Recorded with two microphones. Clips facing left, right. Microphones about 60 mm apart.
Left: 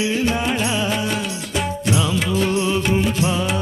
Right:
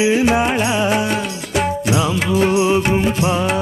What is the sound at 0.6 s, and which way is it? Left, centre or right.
Music, centre.